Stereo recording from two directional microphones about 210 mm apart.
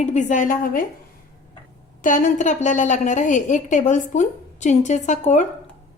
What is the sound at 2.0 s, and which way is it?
A woman's voice, 35° left (ahead or behind).